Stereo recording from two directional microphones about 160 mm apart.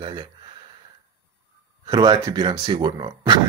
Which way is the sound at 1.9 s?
25° right (ahead or behind).